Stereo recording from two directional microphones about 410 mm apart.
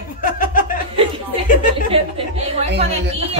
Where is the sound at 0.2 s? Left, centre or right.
Left.